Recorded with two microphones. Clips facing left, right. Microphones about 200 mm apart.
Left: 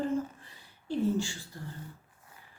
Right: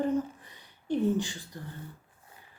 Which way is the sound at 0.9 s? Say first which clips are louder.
Right 2 dB; 20° right (ahead or behind).